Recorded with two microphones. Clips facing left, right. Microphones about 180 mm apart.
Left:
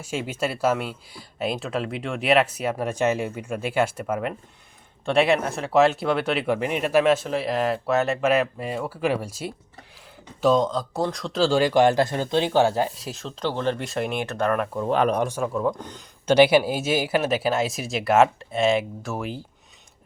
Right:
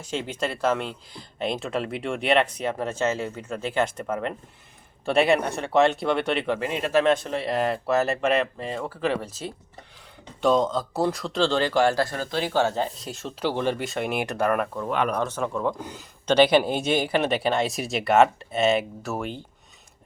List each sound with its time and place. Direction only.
0.0 s speech: 10° left (ahead or behind)
6.6 s speech: 15° left (ahead or behind)
10.4 s speech: centre (ahead or behind)
13.2 s speech: 10° right (ahead or behind)
14.8 s speech: 35° left (ahead or behind)
15.1 s speech: 10° left (ahead or behind)
15.8 s speech: 10° right (ahead or behind)
16.2 s speech: 10° left (ahead or behind)